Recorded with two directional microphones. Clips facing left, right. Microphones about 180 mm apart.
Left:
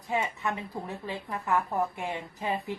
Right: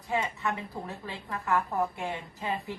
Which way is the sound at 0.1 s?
20° left (ahead or behind).